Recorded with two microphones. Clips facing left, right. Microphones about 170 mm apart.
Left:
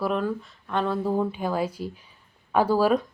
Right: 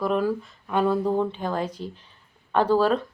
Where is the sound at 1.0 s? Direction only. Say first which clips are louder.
Right 1 dB; 5° left (ahead or behind).